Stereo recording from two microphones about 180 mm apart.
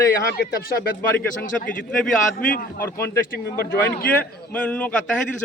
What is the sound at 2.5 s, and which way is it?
Speech, 50° left (ahead or behind).